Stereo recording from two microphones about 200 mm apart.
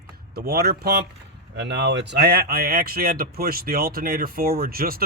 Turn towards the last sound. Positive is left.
turn(degrees=-50)  # may be behind; listen again after turning